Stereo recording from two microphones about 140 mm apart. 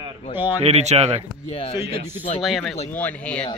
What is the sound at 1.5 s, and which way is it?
Speech, 40° left (ahead or behind).